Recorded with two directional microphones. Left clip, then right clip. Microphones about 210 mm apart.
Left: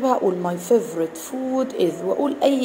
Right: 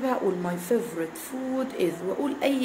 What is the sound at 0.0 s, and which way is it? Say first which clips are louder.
A woman's voice: left 7 dB; 15° left (ahead or behind).